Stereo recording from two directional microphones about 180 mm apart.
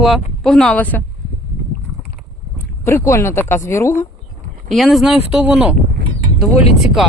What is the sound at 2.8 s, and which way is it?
Speech, 15° left (ahead or behind).